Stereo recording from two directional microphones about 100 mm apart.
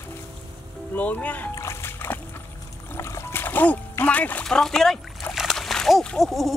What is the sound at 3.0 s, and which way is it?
Music, 25° left (ahead or behind).